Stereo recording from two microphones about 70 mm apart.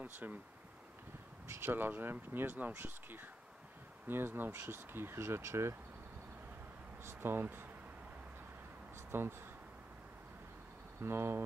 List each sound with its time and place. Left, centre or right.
0.0 s speech: right
1.5 s speech: right
7.1 s speech: right
9.1 s speech: right
11.0 s speech: right